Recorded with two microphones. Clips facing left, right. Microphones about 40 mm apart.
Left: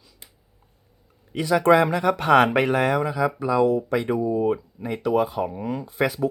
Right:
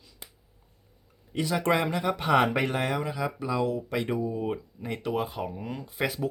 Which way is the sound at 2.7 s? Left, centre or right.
Centre.